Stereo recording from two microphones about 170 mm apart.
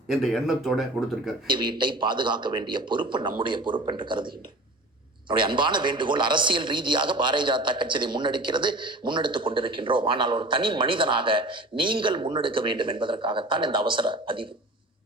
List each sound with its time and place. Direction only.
0.1 s speech: centre (ahead or behind)
1.5 s a man's voice: 25° right (ahead or behind)